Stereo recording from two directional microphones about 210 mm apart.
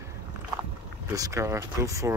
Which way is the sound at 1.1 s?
15° right (ahead or behind).